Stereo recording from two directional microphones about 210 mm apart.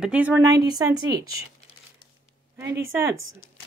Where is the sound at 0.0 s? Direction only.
5° right (ahead or behind).